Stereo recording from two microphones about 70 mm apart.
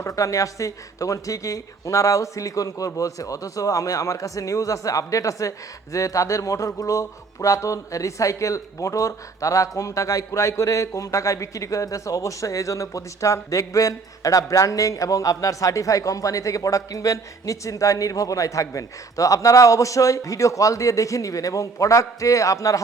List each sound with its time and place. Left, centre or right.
0.0 s speech: left